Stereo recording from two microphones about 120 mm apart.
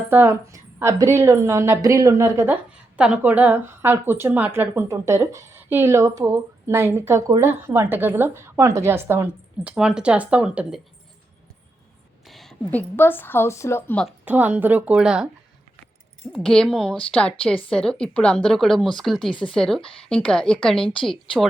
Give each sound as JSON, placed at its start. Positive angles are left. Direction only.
{"t": 0.1, "sound": "a woman's voice", "side_deg": -15}
{"t": 2.9, "sound": "a woman's voice", "side_deg": -10}
{"t": 12.3, "sound": "a sound", "side_deg": 0}
{"t": 12.7, "sound": "a woman's voice", "side_deg": 15}
{"t": 14.3, "sound": "a woman's voice", "side_deg": -15}